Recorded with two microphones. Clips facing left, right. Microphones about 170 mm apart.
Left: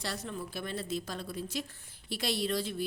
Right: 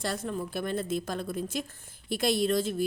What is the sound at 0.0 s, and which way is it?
A woman's voice, 50° right (ahead or behind).